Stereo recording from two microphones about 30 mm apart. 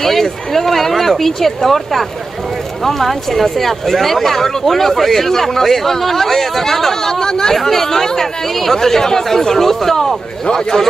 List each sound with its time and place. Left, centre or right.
0.0 s a man's voice: centre
10.4 s a man's voice: left